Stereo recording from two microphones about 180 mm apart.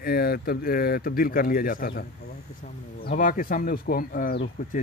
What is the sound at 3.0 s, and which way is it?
Speech, 50° left (ahead or behind).